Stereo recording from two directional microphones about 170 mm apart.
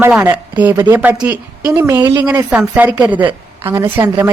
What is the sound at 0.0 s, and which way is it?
Speech, 10° right (ahead or behind).